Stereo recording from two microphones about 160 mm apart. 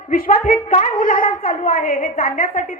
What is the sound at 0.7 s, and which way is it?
A woman's voice, 50° left (ahead or behind).